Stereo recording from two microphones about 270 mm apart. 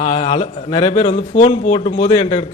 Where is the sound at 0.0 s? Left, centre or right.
Left.